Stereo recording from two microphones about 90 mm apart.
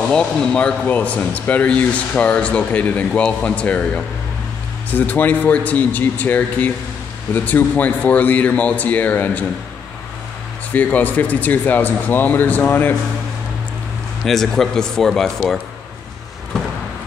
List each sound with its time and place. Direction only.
0.1 s speech: 5° left (ahead or behind)
10.7 s speech: 20° left (ahead or behind)
14.2 s speech: 5° left (ahead or behind)